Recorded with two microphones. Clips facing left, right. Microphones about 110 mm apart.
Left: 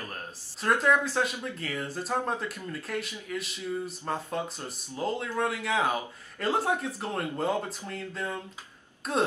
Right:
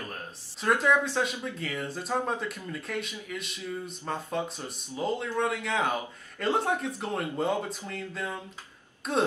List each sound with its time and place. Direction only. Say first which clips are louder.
0.0 s speech: even; centre (ahead or behind)